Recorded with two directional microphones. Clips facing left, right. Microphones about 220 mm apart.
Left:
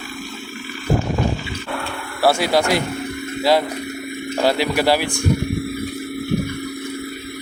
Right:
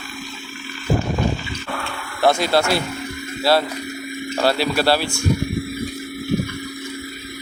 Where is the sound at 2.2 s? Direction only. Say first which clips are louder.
Even; 10° left (ahead or behind).